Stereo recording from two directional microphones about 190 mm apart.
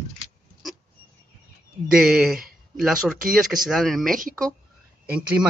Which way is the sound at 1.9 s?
Centre (ahead or behind).